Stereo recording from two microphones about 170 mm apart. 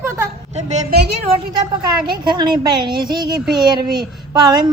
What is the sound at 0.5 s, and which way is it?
Speech, 40° right (ahead or behind).